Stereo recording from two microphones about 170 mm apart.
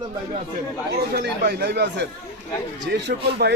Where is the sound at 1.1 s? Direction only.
70° right (ahead or behind).